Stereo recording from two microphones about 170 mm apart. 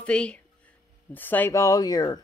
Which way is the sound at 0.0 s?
5° left (ahead or behind).